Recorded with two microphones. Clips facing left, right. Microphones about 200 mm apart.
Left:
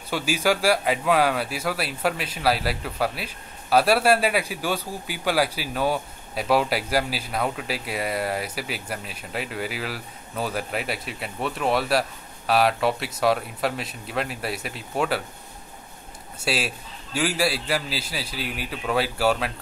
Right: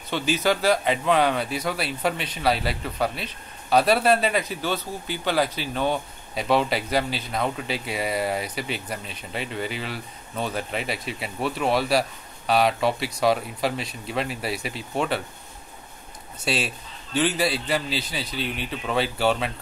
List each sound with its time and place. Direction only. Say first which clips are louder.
0.1 s speech: even; 10° left (ahead or behind)
16.4 s speech: even; 5° left (ahead or behind)